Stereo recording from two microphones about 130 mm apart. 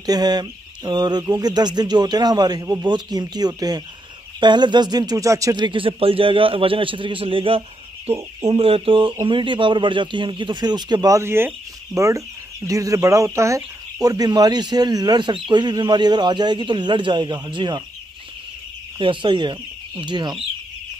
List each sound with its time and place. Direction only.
0.0 s speech: 30° right (ahead or behind)
8.5 s chicken: 45° right (ahead or behind)
9.2 s speech: 40° right (ahead or behind)
18.9 s speech: 40° right (ahead or behind)